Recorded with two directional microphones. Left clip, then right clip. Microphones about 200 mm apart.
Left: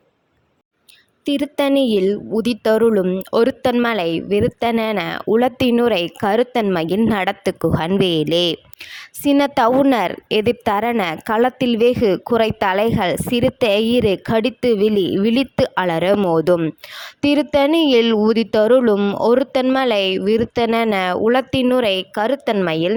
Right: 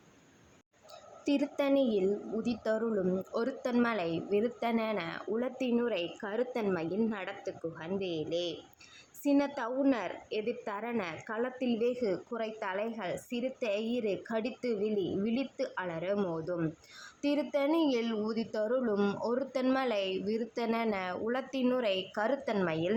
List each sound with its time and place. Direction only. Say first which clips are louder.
1.2 s a woman's voice: left 12 dB; 45° left (ahead or behind)